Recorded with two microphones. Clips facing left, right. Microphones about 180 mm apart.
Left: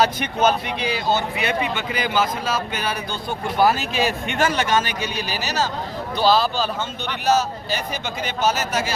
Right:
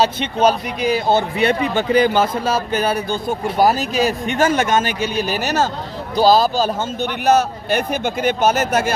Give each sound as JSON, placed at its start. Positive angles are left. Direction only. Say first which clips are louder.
{"t": 0.0, "sound": "speech", "louder": "right 3 dB", "side_deg": -30}
{"t": 0.8, "sound": "speech", "louder": "right 6 dB", "side_deg": -50}
{"t": 1.4, "sound": "speech", "louder": "right 6 dB", "side_deg": -35}
{"t": 6.1, "sound": "speech", "louder": "right 5 dB", "side_deg": -40}